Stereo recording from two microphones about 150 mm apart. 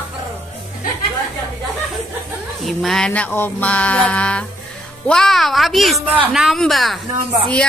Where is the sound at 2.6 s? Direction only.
Centre (ahead or behind).